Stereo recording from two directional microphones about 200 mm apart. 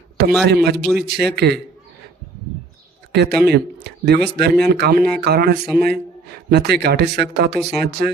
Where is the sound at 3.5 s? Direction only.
55° right (ahead or behind).